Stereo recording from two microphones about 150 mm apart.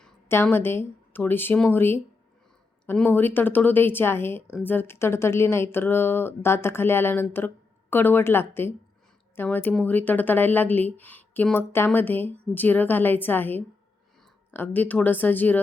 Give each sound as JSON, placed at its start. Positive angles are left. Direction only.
{"t": 0.3, "sound": "speech", "side_deg": 15}